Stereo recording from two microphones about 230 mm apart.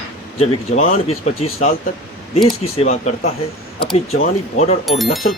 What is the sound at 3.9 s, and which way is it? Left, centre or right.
Speech, left.